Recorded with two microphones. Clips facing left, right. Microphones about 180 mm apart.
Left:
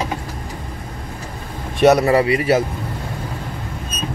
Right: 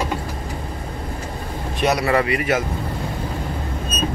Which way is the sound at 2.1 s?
30° left (ahead or behind).